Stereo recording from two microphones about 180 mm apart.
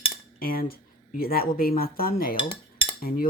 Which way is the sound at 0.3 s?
55° left (ahead or behind).